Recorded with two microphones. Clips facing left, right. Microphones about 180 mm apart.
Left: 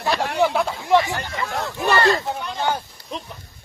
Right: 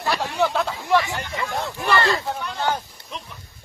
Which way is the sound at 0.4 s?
10° left (ahead or behind).